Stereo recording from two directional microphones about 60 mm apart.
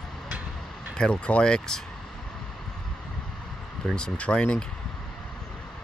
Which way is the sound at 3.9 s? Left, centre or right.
Centre.